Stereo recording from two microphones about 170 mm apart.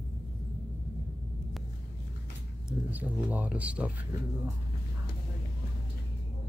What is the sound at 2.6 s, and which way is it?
Speech, 10° right (ahead or behind).